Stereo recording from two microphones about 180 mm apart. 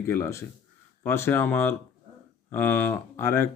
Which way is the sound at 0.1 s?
15° left (ahead or behind).